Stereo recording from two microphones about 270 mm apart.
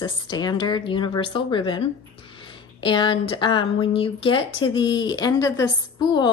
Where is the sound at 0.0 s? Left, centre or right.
Centre.